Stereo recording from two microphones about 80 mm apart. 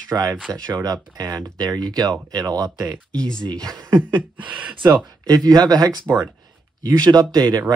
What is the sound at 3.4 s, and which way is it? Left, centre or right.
Speech, right.